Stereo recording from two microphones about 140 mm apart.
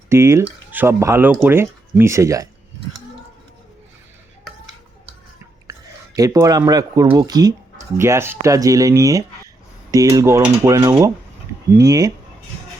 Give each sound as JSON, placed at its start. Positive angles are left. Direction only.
{"t": 0.1, "sound": "speech", "side_deg": -20}
{"t": 6.1, "sound": "speech", "side_deg": -25}